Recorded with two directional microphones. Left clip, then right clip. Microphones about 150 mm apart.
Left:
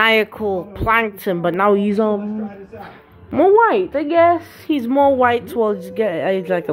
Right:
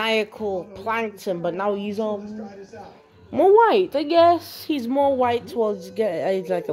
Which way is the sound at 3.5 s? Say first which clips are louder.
Left 1 dB; 40° right (ahead or behind).